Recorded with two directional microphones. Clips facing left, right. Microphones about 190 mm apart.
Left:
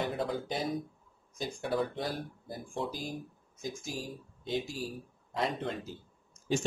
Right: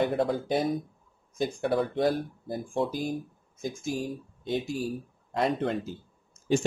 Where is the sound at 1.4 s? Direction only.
60° right (ahead or behind).